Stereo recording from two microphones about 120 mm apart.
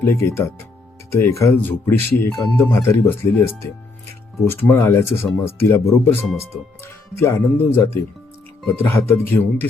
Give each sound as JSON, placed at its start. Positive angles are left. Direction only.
{"t": 0.0, "sound": "speech", "side_deg": 20}